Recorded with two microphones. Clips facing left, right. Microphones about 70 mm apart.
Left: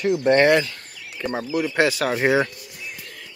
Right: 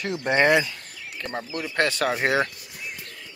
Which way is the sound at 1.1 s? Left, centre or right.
Centre.